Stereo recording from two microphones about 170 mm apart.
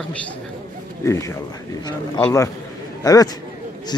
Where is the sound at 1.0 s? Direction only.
15° left (ahead or behind).